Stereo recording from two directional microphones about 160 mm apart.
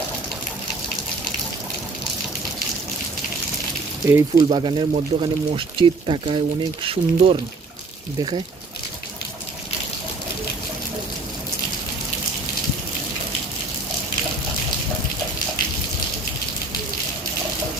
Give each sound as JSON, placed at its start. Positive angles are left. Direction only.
{"t": 4.1, "sound": "speech", "side_deg": -20}
{"t": 4.4, "sound": "speech", "side_deg": -30}